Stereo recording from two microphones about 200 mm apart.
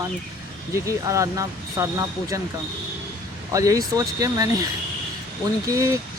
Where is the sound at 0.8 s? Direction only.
15° right (ahead or behind).